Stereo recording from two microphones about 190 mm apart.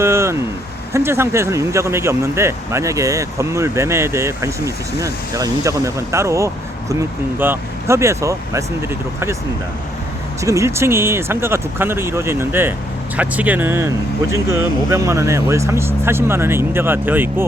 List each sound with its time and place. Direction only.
0.0 s a sound: 15° right (ahead or behind)
0.9 s speech: 15° right (ahead or behind)
10.4 s speech: 15° right (ahead or behind)